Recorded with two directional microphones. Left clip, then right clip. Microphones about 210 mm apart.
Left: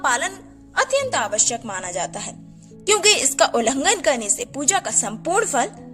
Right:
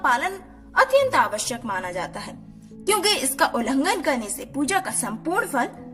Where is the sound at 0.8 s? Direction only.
35° left (ahead or behind).